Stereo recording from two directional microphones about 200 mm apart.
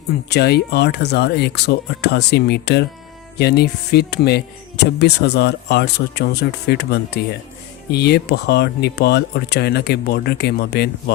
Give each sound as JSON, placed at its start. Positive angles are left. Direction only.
{"t": 0.3, "sound": "speech", "side_deg": 55}